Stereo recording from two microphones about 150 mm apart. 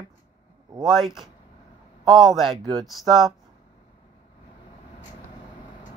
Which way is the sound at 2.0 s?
30° right (ahead or behind).